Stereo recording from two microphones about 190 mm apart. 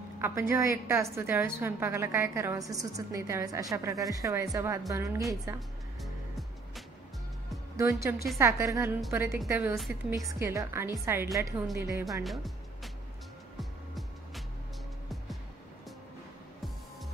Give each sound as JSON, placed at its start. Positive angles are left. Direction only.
{"t": 0.2, "sound": "a woman's voice", "side_deg": -15}
{"t": 7.7, "sound": "a woman's voice", "side_deg": -15}
{"t": 12.0, "sound": "a woman's voice", "side_deg": 0}
{"t": 13.6, "sound": "music", "side_deg": 0}